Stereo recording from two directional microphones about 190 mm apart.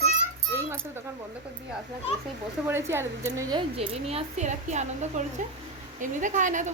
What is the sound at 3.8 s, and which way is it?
A woman's voice, 30° right (ahead or behind).